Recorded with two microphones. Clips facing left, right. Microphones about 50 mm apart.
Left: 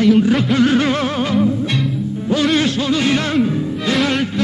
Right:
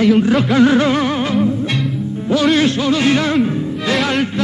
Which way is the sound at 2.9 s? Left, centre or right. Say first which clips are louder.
Right 1 dB; centre.